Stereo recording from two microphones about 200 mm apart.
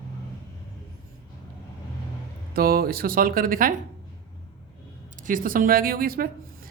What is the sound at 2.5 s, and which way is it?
Speech, 50° right (ahead or behind).